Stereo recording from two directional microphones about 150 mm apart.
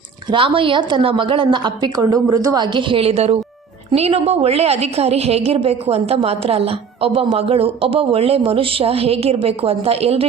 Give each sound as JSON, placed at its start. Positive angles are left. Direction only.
{"t": 0.3, "sound": "a woman's voice", "side_deg": -35}